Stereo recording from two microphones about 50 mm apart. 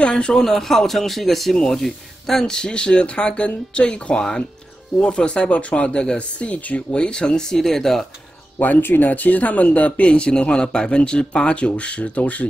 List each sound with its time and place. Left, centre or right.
0.0 s a man's voice: centre
0.5 s a man's voice: centre
8.5 s speech: left